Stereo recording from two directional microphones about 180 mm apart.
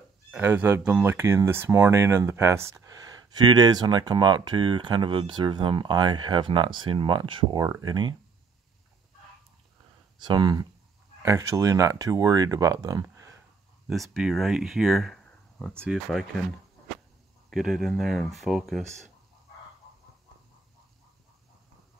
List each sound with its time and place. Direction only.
0.3 s speech: 10° right (ahead or behind)
10.1 s speech: 25° right (ahead or behind)
13.8 s speech: centre (ahead or behind)
17.5 s speech: centre (ahead or behind)